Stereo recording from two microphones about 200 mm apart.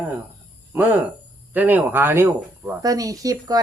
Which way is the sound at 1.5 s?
10° right (ahead or behind).